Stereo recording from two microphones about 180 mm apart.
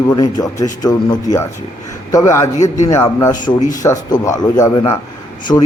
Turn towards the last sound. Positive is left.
turn(degrees=15)  # may be behind; listen again after turning